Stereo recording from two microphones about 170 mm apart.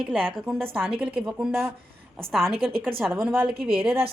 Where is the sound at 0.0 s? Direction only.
10° right (ahead or behind).